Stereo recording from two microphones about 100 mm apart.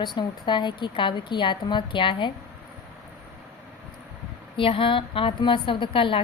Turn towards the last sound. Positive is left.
turn(degrees=60)  # may be behind; listen again after turning